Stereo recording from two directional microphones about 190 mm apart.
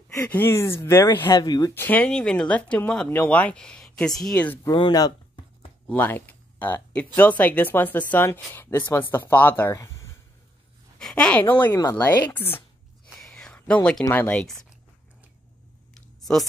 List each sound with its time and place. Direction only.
0.1 s speech: 15° left (ahead or behind)
4.6 s a sound: 25° left (ahead or behind)
5.9 s speech: 10° left (ahead or behind)
11.0 s speech: 5° left (ahead or behind)
11.7 s speech: 20° left (ahead or behind); by 14.7 s 5° left (ahead or behind)